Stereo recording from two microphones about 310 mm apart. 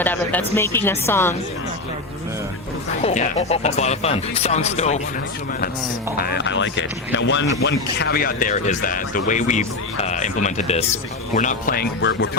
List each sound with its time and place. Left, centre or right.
0.0 s a woman's voice: centre
3.0 s speech: left
6.1 s speech: left